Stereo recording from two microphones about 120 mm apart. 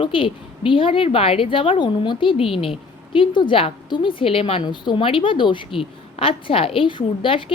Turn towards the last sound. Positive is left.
turn(degrees=45)  # may be behind; listen again after turning